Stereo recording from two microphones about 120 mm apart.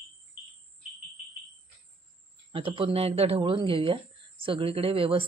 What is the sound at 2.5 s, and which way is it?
Speech, 45° right (ahead or behind).